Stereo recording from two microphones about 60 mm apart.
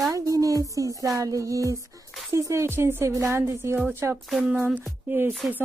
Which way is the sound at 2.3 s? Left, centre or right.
Right.